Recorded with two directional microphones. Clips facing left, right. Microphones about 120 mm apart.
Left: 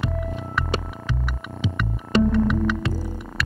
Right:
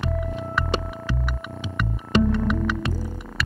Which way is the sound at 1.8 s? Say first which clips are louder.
Left 1 dB; centre (ahead or behind).